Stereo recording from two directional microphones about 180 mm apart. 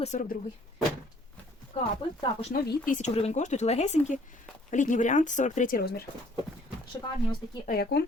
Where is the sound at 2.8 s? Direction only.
40° left (ahead or behind); by 6.0 s 60° left (ahead or behind).